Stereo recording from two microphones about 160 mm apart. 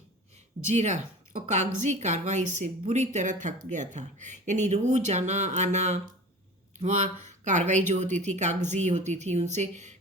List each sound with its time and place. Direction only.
0.7 s a woman's voice: 45° right (ahead or behind)
7.4 s a woman's voice: 50° right (ahead or behind)